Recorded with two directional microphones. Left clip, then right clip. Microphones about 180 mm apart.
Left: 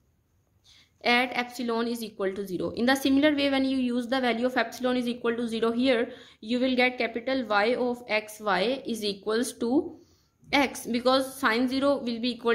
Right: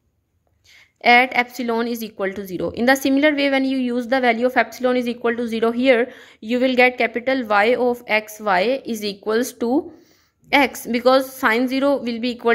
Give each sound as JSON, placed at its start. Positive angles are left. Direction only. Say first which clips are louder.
{"t": 1.0, "sound": "a woman's voice", "louder": "right 11 dB", "side_deg": -25}